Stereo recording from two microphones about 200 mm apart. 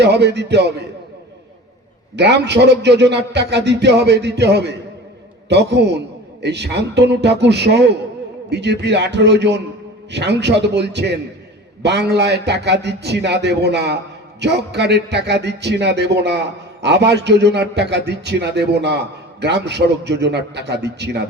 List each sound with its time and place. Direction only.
0.0 s a man's voice: 55° right (ahead or behind)
2.1 s a man's voice: 60° right (ahead or behind)